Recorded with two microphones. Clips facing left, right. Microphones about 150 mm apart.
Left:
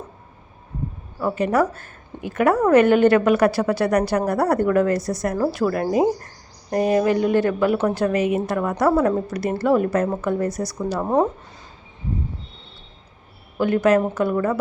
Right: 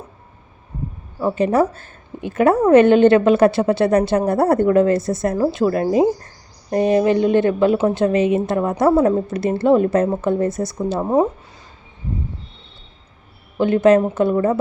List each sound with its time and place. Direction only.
1.2 s a woman's voice: 30° right (ahead or behind)
11.0 s speech: 10° right (ahead or behind)
13.6 s a woman's voice: 25° right (ahead or behind)